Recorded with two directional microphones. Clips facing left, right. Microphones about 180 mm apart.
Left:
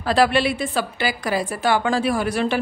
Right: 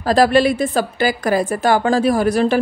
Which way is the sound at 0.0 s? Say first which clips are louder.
Right 5 dB; 40° right (ahead or behind).